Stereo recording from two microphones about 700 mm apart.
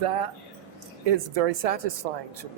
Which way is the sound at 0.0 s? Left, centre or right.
Right.